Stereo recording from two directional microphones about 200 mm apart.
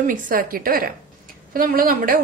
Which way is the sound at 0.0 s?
45° right (ahead or behind).